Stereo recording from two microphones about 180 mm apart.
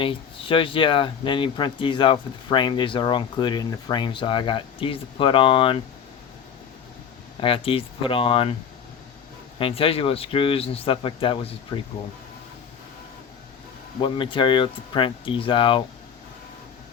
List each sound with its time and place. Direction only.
0.0 s speech: 30° left (ahead or behind)
7.4 s speech: 30° left (ahead or behind)
9.6 s speech: 30° left (ahead or behind)
14.0 s speech: 30° left (ahead or behind)